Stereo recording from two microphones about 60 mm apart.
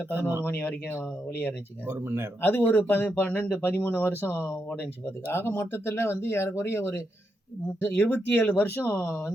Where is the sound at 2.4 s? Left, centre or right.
Left.